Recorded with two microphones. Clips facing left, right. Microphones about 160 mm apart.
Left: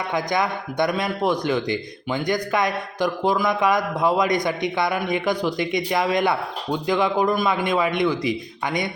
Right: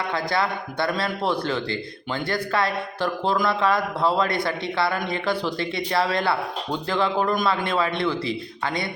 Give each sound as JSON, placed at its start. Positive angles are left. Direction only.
{"t": 0.1, "sound": "a man's voice", "side_deg": 15}